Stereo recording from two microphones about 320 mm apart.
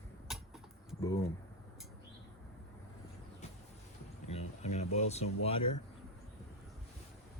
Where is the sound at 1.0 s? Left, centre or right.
Centre.